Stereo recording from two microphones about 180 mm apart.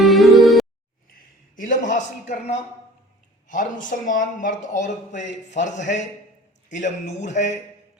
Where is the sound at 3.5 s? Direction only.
45° left (ahead or behind).